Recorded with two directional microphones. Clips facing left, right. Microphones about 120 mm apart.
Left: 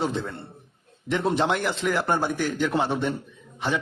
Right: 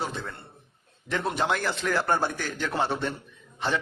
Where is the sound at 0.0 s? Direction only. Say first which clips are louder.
Left 6 dB; 20° left (ahead or behind).